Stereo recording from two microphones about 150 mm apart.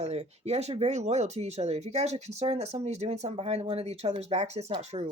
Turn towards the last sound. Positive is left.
turn(degrees=-45)  # may be behind; listen again after turning